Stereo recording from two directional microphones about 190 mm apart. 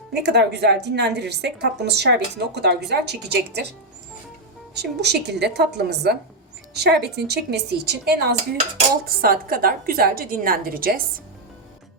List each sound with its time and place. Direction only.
0.1 s a woman's voice: 60° right (ahead or behind)
4.7 s a woman's voice: 60° right (ahead or behind)